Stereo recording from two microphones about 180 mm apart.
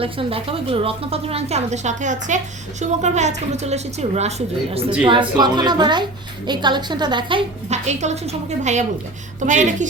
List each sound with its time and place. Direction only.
0.0 s a woman's voice: 30° right (ahead or behind)